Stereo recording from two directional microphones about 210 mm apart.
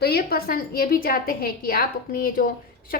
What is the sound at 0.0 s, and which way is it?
A woman's voice, 45° left (ahead or behind).